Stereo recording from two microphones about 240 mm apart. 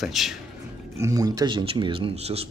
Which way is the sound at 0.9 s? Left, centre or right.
Centre.